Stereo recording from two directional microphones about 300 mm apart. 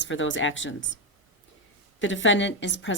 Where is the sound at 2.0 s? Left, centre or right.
Left.